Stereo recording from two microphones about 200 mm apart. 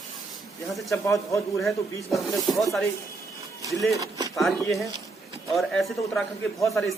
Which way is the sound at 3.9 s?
15° right (ahead or behind).